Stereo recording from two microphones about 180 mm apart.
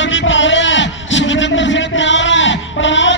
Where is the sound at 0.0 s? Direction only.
90° left.